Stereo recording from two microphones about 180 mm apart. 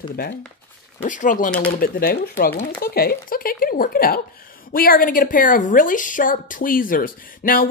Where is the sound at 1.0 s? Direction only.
45° left (ahead or behind).